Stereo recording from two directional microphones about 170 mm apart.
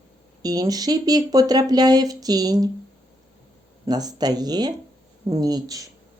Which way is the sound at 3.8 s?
25° right (ahead or behind).